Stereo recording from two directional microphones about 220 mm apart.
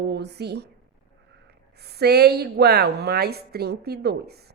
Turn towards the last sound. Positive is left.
turn(degrees=-45)  # may be behind; listen again after turning